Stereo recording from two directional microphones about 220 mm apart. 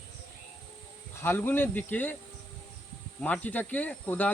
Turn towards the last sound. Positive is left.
turn(degrees=5)  # may be behind; listen again after turning